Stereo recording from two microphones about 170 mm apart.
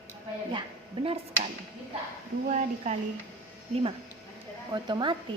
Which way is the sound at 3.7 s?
30° right (ahead or behind).